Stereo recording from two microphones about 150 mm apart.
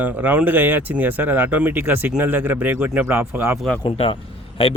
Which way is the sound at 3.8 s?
35° left (ahead or behind).